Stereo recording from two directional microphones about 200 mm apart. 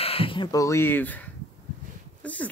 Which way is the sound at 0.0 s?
30° left (ahead or behind).